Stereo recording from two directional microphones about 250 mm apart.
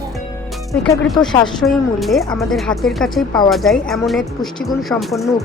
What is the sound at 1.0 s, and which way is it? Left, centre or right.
Speech, centre.